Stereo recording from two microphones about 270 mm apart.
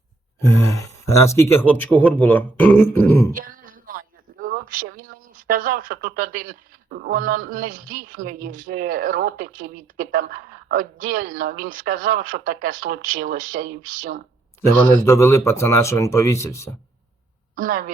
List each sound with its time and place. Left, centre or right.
0.6 s speech: centre
3.3 s a man's voice: right
15.0 s speech: centre
17.5 s a woman's voice: right